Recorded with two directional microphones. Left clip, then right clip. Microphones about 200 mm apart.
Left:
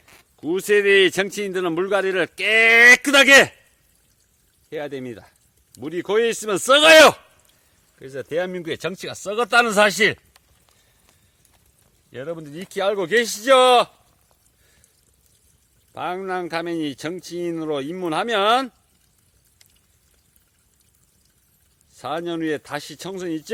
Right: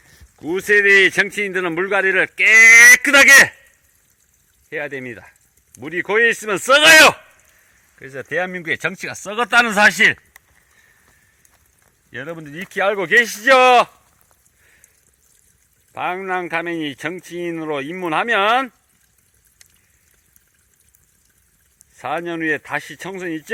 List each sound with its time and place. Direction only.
0.4 s a man's voice: 15° left (ahead or behind)
4.7 s a man's voice: 15° left (ahead or behind)
12.1 s a man's voice: 5° left (ahead or behind)
16.0 s a man's voice: 10° left (ahead or behind)
21.9 s a man's voice: 15° left (ahead or behind)